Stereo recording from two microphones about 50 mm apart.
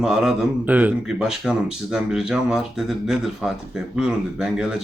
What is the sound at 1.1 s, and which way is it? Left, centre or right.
Speech, centre.